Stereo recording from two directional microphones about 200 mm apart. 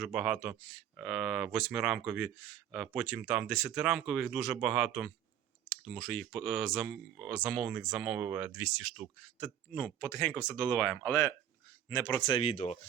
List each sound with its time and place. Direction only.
0.0 s speech: 5° right (ahead or behind); by 12.8 s 35° left (ahead or behind)